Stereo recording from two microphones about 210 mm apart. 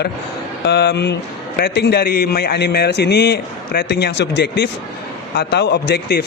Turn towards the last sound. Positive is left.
turn(degrees=50)  # may be behind; listen again after turning